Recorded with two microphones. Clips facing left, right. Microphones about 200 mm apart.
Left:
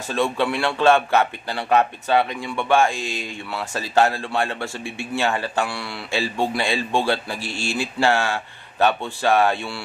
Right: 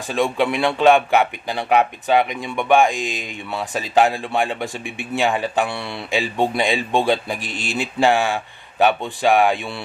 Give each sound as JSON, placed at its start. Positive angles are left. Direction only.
{"t": 0.1, "sound": "a man's voice", "side_deg": -15}